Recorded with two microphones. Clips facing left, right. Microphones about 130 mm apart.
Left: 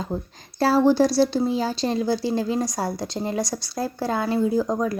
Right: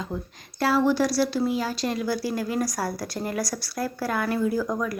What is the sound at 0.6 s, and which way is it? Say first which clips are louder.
A woman's voice: left 4 dB; 30° left (ahead or behind).